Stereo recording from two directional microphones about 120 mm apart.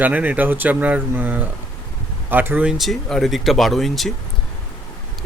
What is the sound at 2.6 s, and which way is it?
Speech, centre (ahead or behind).